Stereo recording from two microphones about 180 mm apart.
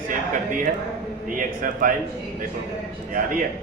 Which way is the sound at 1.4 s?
50° right (ahead or behind).